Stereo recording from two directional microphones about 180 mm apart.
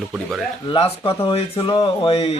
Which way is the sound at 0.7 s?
30° left (ahead or behind).